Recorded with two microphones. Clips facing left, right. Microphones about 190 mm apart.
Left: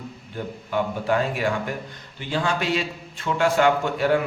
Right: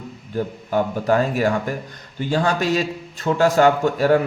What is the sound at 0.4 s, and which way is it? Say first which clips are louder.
A man's voice: right 5 dB; 35° right (ahead or behind).